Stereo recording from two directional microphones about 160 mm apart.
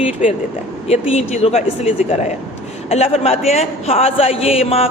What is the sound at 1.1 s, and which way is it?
A man's voice, 40° left (ahead or behind).